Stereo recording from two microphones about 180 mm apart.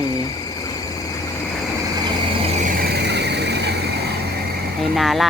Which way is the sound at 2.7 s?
65° right (ahead or behind).